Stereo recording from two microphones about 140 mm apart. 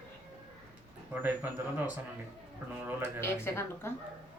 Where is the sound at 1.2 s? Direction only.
10° right (ahead or behind).